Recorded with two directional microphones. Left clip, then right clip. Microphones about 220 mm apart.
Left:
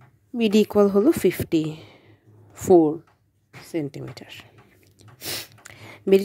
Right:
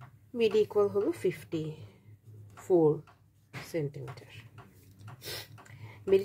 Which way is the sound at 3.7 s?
45° left (ahead or behind).